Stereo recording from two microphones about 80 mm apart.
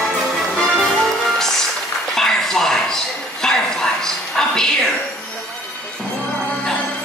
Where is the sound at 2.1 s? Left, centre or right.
Centre.